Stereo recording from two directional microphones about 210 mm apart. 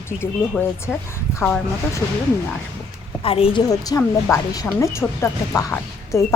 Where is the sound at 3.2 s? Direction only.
25° left (ahead or behind).